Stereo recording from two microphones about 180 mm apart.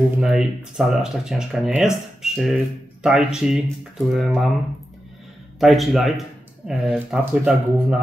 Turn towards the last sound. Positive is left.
turn(degrees=-5)  # may be behind; listen again after turning